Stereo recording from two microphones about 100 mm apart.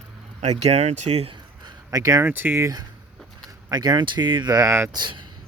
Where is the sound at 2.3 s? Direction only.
20° right (ahead or behind).